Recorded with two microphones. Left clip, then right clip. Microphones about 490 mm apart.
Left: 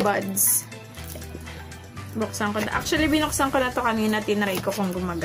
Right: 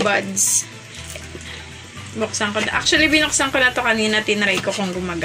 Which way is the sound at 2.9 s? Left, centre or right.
Left.